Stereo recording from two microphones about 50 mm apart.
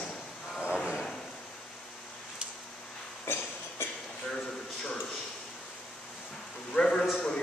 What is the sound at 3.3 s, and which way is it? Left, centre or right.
Cough, left.